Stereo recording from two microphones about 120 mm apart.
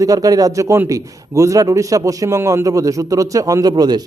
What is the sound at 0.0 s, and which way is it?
A man's voice, 30° right (ahead or behind).